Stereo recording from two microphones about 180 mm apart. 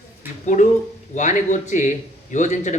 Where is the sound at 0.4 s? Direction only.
45° left (ahead or behind).